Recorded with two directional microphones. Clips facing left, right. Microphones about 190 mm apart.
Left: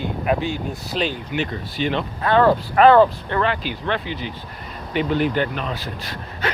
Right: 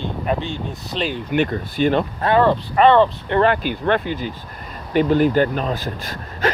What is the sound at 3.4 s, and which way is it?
Speech, 50° right (ahead or behind).